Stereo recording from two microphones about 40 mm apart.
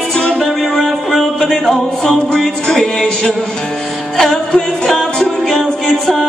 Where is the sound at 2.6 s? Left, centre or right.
Centre.